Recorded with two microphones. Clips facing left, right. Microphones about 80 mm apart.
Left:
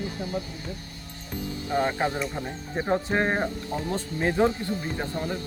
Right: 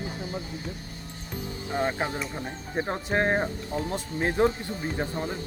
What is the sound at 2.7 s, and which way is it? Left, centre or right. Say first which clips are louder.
Speech: left 2 dB; centre.